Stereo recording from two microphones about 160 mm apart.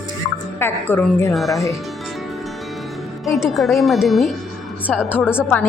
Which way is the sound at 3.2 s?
Centre (ahead or behind).